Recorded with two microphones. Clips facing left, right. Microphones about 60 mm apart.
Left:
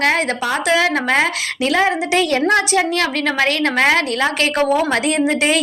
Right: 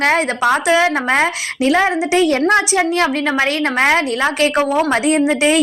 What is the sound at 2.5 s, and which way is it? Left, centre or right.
A woman's voice, right.